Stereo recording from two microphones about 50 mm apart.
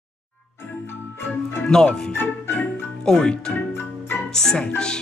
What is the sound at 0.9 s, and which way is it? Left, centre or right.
Music, left.